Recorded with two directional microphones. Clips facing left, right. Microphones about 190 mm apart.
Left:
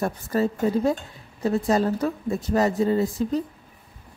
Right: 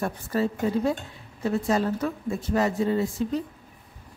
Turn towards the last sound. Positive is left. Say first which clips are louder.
# left 3 dB
turn(degrees=40)  # may be behind; listen again after turning